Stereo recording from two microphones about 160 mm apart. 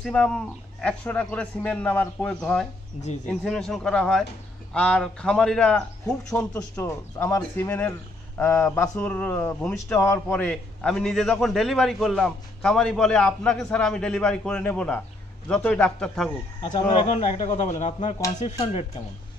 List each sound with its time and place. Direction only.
0.0 s a man's voice: 5° left (ahead or behind)
16.9 s speech: 45° left (ahead or behind)
18.6 s speech: 35° left (ahead or behind)